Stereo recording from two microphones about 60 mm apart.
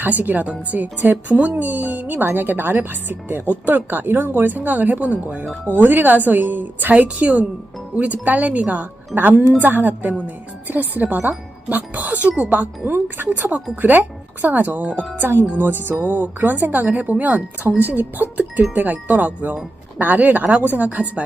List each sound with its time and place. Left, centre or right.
0.0 s speech: right